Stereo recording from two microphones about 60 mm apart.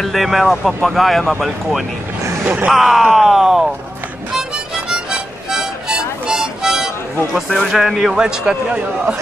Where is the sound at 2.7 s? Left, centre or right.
Centre.